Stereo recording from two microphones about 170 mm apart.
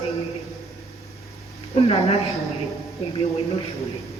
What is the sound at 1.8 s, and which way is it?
Speech, 35° left (ahead or behind).